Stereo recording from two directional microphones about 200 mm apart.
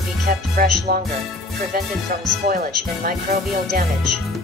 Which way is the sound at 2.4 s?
50° right (ahead or behind).